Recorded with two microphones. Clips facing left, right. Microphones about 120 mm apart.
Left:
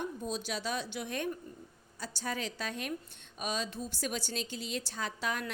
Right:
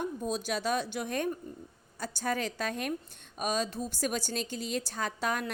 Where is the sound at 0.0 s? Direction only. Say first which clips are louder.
Right 4 dB; 45° right (ahead or behind).